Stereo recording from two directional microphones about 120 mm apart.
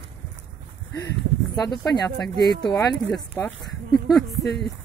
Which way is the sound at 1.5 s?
35° left (ahead or behind).